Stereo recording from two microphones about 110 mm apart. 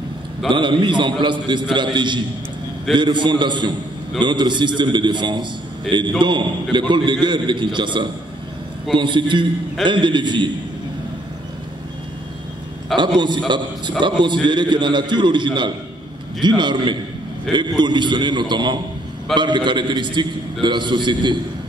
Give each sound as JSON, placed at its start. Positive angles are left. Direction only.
{"t": 0.5, "sound": "a man's voice", "side_deg": -45}
{"t": 12.9, "sound": "a man's voice", "side_deg": -45}